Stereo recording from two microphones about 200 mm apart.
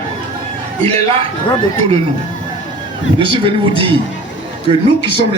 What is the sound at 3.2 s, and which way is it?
Speech, 25° right (ahead or behind).